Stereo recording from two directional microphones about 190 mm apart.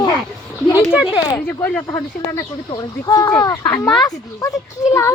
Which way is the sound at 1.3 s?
10° left (ahead or behind).